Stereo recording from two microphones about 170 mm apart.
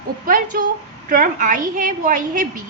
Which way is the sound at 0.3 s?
55° right (ahead or behind).